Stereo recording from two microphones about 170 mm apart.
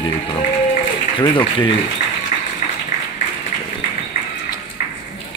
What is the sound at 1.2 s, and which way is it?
Speech, 30° left (ahead or behind).